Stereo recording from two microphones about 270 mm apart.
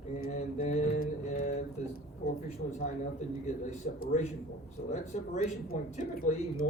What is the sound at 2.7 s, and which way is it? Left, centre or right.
Speech, left.